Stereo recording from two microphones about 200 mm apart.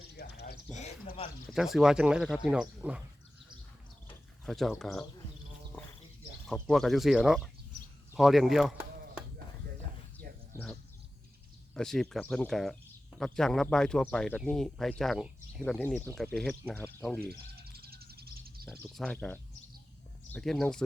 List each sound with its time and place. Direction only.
0.1 s bird: 55° left (ahead or behind)
0.8 s speech: 35° left (ahead or behind)
1.5 s speech: centre (ahead or behind)
4.4 s speech: centre (ahead or behind)
6.5 s speech: centre (ahead or behind)
11.7 s speech: 5° left (ahead or behind)
17.2 s bird: 50° right (ahead or behind)
18.9 s speech: 5° left (ahead or behind)